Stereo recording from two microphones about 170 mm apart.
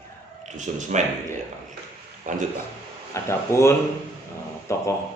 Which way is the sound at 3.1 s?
15° left (ahead or behind).